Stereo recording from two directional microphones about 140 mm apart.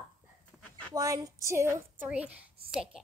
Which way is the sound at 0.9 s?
25° right (ahead or behind).